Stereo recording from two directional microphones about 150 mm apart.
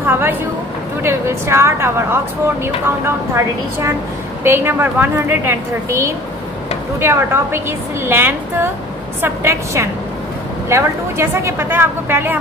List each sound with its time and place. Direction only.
0.0 s a sound: 15° right (ahead or behind)
1.0 s a woman's voice: 15° right (ahead or behind)
4.4 s a woman's voice: 15° right (ahead or behind)